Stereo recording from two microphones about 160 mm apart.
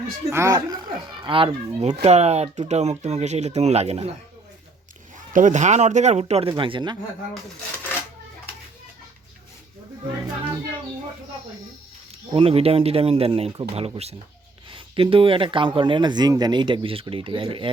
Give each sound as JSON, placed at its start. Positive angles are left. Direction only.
{"t": 0.3, "sound": "speech", "side_deg": -15}
{"t": 5.3, "sound": "speech", "side_deg": -55}
{"t": 12.3, "sound": "speech", "side_deg": -35}